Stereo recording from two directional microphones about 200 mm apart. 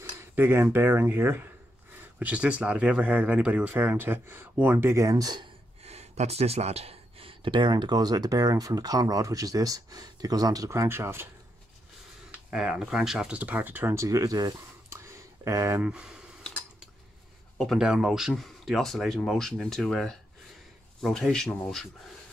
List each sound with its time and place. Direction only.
0.2 s cutlery: 10° right (ahead or behind)
0.7 s speech: 10° right (ahead or behind)
12.3 s speech: 5° right (ahead or behind)